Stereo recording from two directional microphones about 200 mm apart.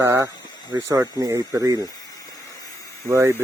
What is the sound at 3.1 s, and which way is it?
Speech, 15° right (ahead or behind).